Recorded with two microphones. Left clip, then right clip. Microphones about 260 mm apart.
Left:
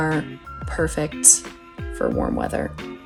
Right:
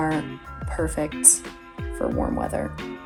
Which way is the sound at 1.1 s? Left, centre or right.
Centre.